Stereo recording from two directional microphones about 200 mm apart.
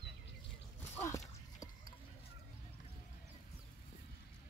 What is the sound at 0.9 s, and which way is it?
Walk, 15° left (ahead or behind).